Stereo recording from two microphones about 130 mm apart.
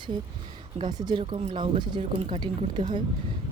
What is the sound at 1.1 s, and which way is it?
Speech, 50° right (ahead or behind).